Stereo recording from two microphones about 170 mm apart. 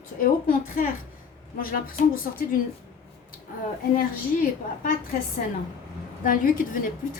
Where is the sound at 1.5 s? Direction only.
55° left (ahead or behind).